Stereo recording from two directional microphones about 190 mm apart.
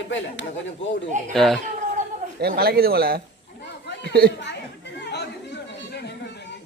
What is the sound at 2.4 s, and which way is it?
Speech, 55° right (ahead or behind).